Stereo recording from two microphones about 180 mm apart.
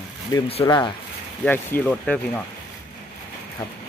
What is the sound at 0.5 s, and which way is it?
Speech, 30° left (ahead or behind).